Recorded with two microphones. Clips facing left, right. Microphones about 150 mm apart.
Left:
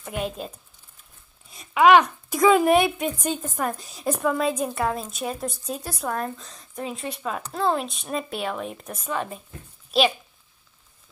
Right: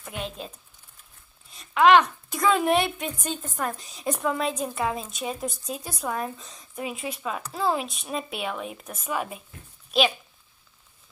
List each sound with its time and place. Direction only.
0.0 s a woman's voice: 5° left (ahead or behind)
1.5 s a woman's voice: 10° left (ahead or behind); by 9.4 s 5° right (ahead or behind)
9.8 s a sound: centre (ahead or behind)